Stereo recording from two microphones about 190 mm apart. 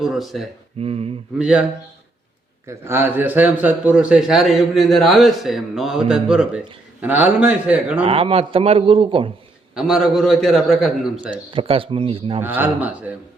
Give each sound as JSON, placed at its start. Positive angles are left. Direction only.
{"t": 0.0, "sound": "a man's voice", "side_deg": 0}
{"t": 0.8, "sound": "speech", "side_deg": -30}
{"t": 1.4, "sound": "a man's voice", "side_deg": -5}
{"t": 2.6, "sound": "a man's voice", "side_deg": -15}
{"t": 8.0, "sound": "a man's voice", "side_deg": -30}
{"t": 9.7, "sound": "a man's voice", "side_deg": 0}
{"t": 11.5, "sound": "a man's voice", "side_deg": -30}
{"t": 12.4, "sound": "speech", "side_deg": -10}